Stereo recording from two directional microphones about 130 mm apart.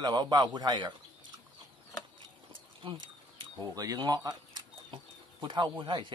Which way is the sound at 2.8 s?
35° right (ahead or behind).